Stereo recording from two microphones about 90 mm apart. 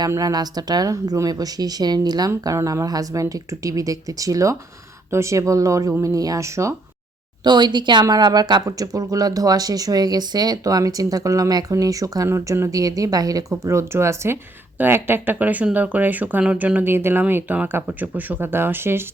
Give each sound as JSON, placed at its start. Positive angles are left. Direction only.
{"t": 0.2, "sound": "speech", "side_deg": -45}
{"t": 7.4, "sound": "a woman's voice", "side_deg": -55}
{"t": 8.6, "sound": "speech", "side_deg": -40}